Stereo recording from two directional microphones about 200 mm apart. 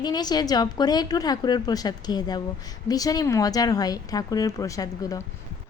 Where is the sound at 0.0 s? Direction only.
20° left (ahead or behind).